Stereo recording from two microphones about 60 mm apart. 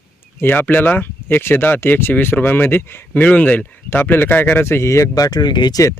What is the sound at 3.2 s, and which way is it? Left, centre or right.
Speech, left.